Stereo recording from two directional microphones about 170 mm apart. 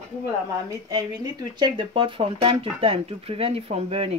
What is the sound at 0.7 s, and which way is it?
Speech, 20° right (ahead or behind).